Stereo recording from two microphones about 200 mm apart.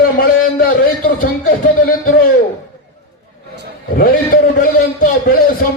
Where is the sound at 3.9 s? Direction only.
45° left (ahead or behind).